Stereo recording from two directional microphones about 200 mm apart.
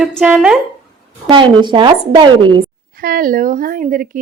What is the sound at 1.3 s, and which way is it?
A woman's voice, 25° right (ahead or behind).